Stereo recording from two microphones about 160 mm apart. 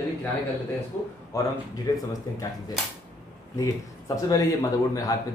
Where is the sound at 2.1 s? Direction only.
20° left (ahead or behind).